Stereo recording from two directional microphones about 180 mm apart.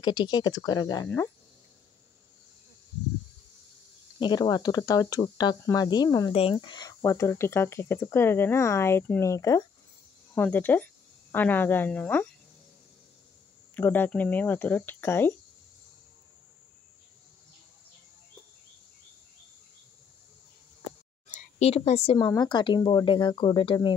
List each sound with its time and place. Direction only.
0.0 s speech: 25° left (ahead or behind)
4.2 s speech: 25° left (ahead or behind); by 12.3 s 5° left (ahead or behind)
13.7 s speech: 10° left (ahead or behind)
21.4 s a woman's voice: 35° left (ahead or behind)